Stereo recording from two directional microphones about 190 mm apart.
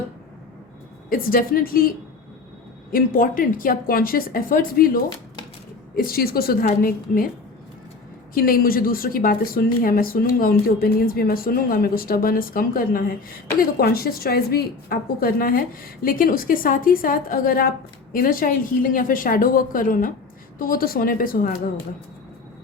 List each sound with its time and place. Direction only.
1.1 s a woman's voice: 50° left (ahead or behind)
2.9 s a woman's voice: 50° left (ahead or behind)
8.3 s a woman's voice: 50° left (ahead or behind)